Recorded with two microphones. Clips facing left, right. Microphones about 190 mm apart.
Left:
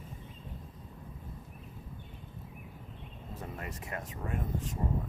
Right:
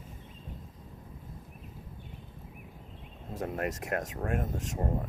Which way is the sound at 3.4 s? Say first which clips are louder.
Right 10 dB; 65° right (ahead or behind).